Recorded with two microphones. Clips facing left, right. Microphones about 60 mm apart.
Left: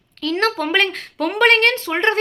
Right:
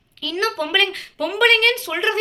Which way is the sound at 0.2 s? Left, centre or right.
Left.